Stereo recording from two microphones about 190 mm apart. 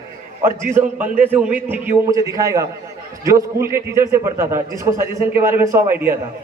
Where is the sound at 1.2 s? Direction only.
10° right (ahead or behind).